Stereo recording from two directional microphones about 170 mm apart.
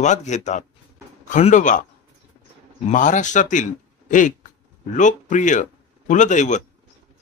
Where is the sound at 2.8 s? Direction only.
50° left (ahead or behind).